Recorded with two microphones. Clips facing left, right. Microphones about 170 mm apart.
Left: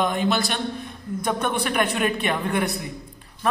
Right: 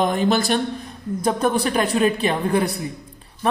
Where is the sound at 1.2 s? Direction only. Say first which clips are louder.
Right 5 dB; 35° right (ahead or behind).